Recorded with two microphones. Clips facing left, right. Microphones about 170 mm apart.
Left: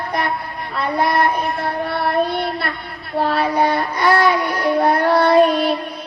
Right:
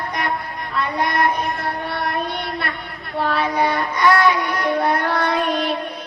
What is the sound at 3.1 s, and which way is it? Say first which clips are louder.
Child singing: left 3 dB; 35° left (ahead or behind).